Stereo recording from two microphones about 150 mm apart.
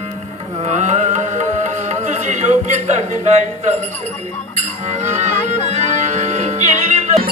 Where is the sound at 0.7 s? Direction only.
50° right (ahead or behind).